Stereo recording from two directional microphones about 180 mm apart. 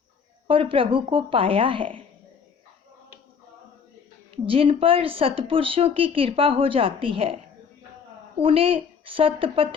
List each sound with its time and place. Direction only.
0.4 s speech: 30° right (ahead or behind)
4.4 s a woman's voice: 30° right (ahead or behind)
8.4 s a woman's voice: 30° right (ahead or behind)